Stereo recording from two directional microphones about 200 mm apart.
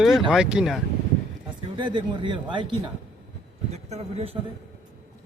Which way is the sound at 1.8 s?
25° right (ahead or behind).